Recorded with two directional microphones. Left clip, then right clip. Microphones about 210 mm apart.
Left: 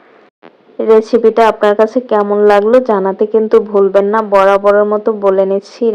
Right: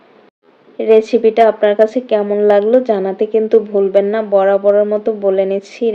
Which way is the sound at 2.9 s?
Centre (ahead or behind).